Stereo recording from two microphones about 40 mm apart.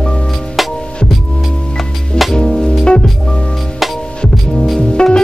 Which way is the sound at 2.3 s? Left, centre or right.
Left.